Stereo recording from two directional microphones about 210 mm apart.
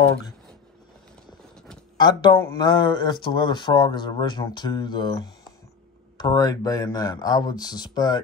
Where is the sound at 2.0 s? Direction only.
20° left (ahead or behind).